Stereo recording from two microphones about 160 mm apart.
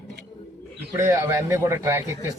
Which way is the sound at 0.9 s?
15° right (ahead or behind).